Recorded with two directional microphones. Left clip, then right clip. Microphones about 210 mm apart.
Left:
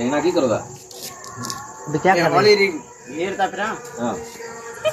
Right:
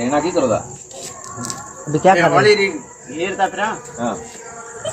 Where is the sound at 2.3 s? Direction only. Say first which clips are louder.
Right 2 dB; 5° right (ahead or behind).